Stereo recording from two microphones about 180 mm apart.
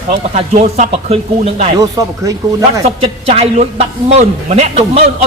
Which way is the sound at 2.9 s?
35° right (ahead or behind).